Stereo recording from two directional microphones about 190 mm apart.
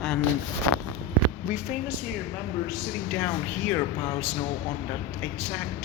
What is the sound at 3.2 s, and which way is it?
Speech, 10° left (ahead or behind).